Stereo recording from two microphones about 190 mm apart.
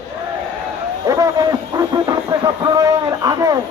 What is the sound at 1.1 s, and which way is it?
Speech, 20° right (ahead or behind).